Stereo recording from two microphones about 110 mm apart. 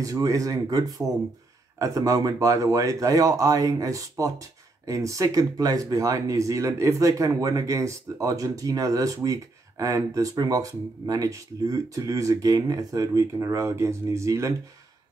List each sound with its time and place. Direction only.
0.0 s speech: 30° right (ahead or behind)